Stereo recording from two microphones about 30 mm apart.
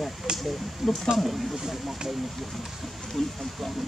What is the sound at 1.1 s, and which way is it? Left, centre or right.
Speech, centre.